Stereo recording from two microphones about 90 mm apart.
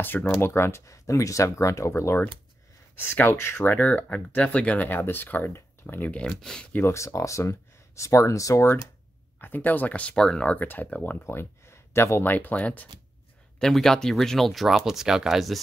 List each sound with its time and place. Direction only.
0.0 s speech: 20° left (ahead or behind)
6.7 s speech: 30° left (ahead or behind)
9.4 s speech: 20° left (ahead or behind)
11.2 s speech: 30° left (ahead or behind)
13.6 s speech: 5° left (ahead or behind)